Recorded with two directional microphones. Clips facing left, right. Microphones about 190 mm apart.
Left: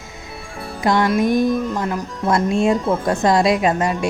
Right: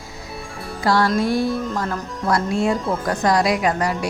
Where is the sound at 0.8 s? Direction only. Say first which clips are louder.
Left 2 dB; 20° left (ahead or behind).